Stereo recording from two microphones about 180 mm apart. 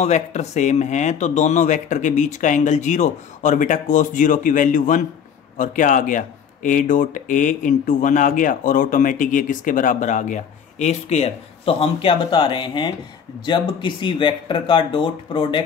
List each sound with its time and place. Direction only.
0.0 s speech: 40° left (ahead or behind)